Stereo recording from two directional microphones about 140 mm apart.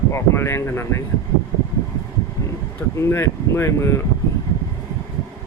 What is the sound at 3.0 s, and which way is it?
Speech, 20° left (ahead or behind).